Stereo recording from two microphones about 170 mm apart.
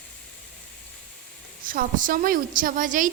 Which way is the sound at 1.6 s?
55° right (ahead or behind).